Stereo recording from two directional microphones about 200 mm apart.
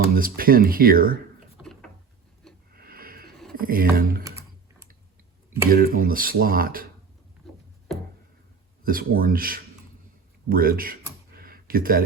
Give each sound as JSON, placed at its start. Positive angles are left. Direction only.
{"t": 0.1, "sound": "speech", "side_deg": -45}
{"t": 1.6, "sound": "drawer open or close", "side_deg": 0}
{"t": 2.7, "sound": "a sound", "side_deg": -45}
{"t": 3.5, "sound": "speech", "side_deg": -45}
{"t": 5.7, "sound": "speech", "side_deg": -45}
{"t": 8.8, "sound": "speech", "side_deg": -45}
{"t": 11.3, "sound": "a sound", "side_deg": -45}